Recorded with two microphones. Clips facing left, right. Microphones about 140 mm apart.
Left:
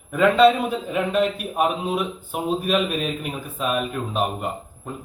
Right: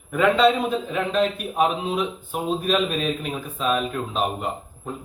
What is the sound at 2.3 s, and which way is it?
A man's voice, 5° left (ahead or behind).